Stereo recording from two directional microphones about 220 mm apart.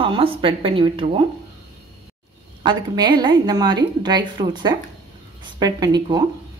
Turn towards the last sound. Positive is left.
turn(degrees=-20)  # may be behind; listen again after turning